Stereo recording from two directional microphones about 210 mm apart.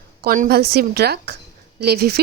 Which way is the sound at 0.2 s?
45° right (ahead or behind).